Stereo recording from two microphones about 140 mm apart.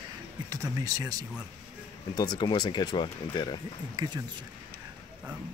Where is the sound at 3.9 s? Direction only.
30° right (ahead or behind).